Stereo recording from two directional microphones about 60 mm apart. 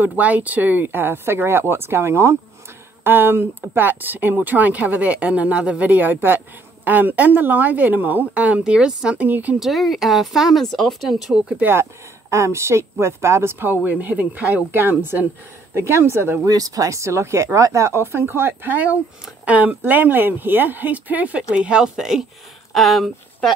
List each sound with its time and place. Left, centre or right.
0.0 s speech: right
3.0 s speech: right
9.6 s speech: centre
11.6 s speech: right
16.4 s speech: right; by 23.5 s centre